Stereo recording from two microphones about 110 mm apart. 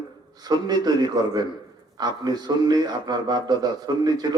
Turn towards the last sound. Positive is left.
turn(degrees=-40)  # may be behind; listen again after turning